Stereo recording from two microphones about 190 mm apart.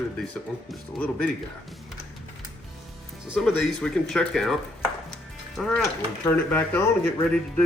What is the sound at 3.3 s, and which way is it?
Speech, centre (ahead or behind).